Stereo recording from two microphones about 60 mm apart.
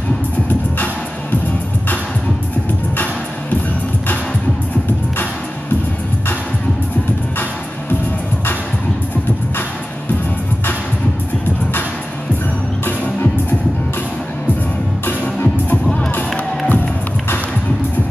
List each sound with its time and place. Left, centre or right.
12.8 s music: left
15.0 s music: left